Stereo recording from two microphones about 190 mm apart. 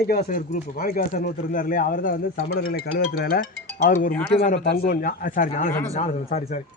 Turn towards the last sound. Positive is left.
turn(degrees=35)  # may be behind; listen again after turning